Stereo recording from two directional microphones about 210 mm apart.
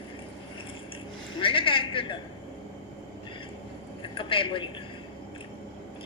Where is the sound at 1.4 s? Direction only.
25° left (ahead or behind).